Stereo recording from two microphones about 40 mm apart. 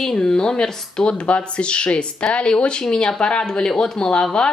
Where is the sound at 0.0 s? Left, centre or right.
Centre.